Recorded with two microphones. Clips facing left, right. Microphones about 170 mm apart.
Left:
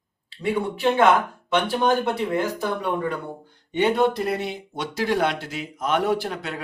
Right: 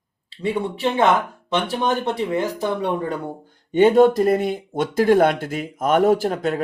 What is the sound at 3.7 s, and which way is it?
Speech, 45° right (ahead or behind).